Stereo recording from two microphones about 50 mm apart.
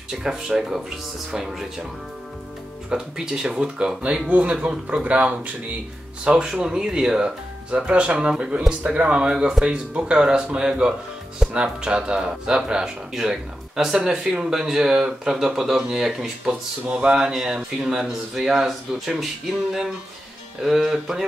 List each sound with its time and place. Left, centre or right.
0.1 s speech: centre
2.9 s speech: centre
6.2 s speech: centre
20.6 s speech: centre